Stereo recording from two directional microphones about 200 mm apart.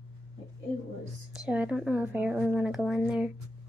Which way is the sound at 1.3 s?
5° right (ahead or behind).